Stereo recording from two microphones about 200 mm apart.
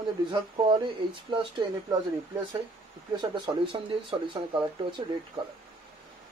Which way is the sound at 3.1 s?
20° right (ahead or behind).